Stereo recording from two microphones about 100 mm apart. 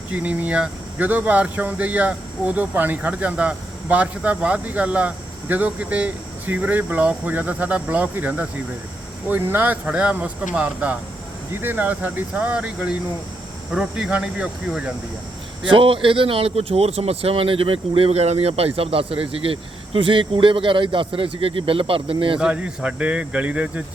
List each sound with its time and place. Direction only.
0.1 s speech: 15° right (ahead or behind)
15.7 s speech: 60° right (ahead or behind)
22.4 s speech: 10° right (ahead or behind)